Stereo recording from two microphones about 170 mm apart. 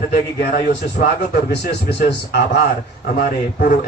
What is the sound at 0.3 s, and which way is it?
Speech, 60° left (ahead or behind).